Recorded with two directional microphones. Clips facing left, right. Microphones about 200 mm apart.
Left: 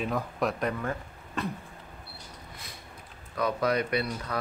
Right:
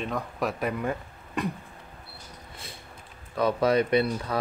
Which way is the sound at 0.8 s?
15° right (ahead or behind).